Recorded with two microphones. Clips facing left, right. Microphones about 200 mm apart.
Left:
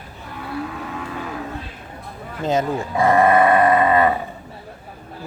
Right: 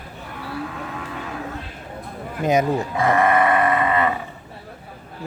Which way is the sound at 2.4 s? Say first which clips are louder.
Right 2 dB; 15° right (ahead or behind).